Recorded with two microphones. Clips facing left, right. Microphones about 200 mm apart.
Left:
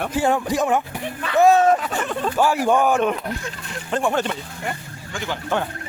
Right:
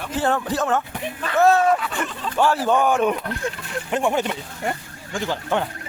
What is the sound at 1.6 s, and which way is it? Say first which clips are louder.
Speech: left 2 dB; 40° left (ahead or behind).